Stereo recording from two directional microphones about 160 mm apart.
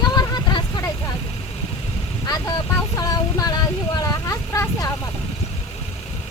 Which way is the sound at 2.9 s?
20° left (ahead or behind).